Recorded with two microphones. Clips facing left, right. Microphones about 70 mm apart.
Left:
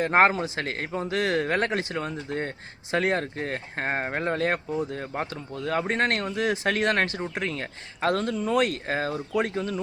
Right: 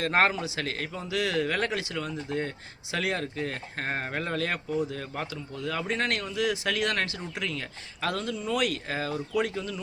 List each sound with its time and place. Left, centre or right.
0.0 s a man's voice: left